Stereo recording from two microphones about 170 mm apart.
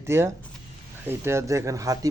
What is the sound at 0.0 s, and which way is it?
Speech, 15° right (ahead or behind).